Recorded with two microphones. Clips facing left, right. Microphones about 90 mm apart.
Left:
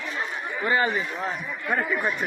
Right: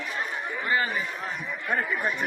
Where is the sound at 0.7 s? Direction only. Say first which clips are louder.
Left 3 dB; 30° left (ahead or behind).